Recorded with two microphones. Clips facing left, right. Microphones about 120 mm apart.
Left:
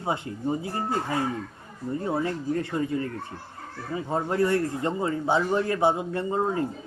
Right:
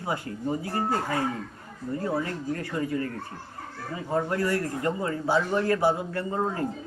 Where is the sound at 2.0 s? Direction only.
25° left (ahead or behind).